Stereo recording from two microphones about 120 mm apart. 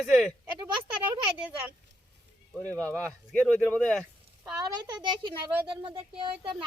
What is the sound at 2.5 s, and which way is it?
Speech, 10° left (ahead or behind).